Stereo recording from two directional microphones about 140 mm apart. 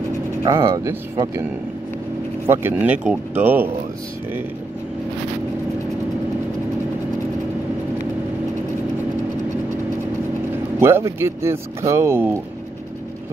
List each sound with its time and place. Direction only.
0.4 s speech: 20° right (ahead or behind)
2.4 s speech: 15° right (ahead or behind)
10.5 s speech: 15° right (ahead or behind)